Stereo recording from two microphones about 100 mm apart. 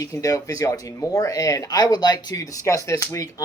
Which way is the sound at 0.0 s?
35° left (ahead or behind).